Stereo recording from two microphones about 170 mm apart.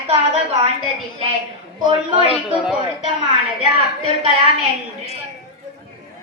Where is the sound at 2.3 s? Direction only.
5° right (ahead or behind).